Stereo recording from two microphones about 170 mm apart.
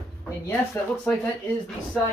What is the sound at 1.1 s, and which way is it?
Speech, 10° left (ahead or behind).